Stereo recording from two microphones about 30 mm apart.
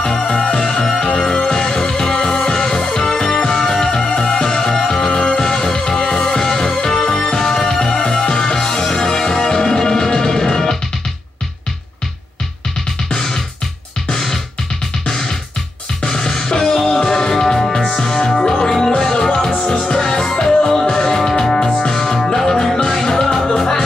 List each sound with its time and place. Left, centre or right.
0.0 s music: left
0.3 s music: left
1.5 s music: centre
7.8 s music: left
14.1 s music: centre
16.1 s music: centre